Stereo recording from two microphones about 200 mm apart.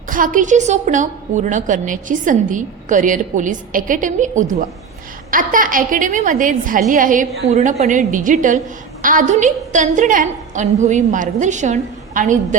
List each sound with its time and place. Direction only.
0.1 s a woman's voice: 40° right (ahead or behind)